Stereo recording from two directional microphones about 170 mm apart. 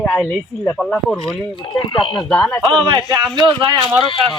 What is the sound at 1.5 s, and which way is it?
Speech, 30° left (ahead or behind).